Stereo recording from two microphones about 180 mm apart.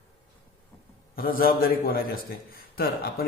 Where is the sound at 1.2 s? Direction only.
55° left (ahead or behind).